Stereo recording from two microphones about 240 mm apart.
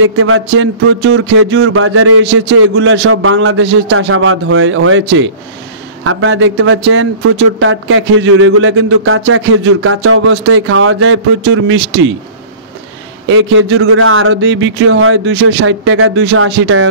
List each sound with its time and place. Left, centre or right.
0.2 s a man's voice: right
13.3 s a man's voice: right